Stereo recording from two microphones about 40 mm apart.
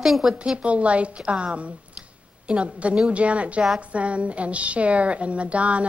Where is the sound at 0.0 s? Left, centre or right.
Centre.